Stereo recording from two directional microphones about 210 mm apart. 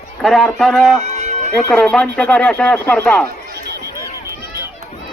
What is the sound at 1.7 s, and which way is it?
Speech, 5° left (ahead or behind).